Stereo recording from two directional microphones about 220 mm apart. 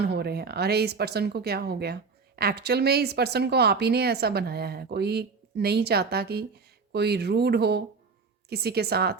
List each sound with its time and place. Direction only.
0.0 s speech: 50° right (ahead or behind)